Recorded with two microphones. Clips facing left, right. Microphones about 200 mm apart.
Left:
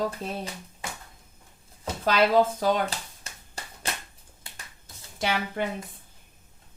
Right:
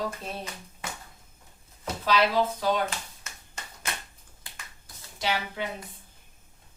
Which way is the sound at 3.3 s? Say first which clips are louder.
Left 2 dB; 30° left (ahead or behind).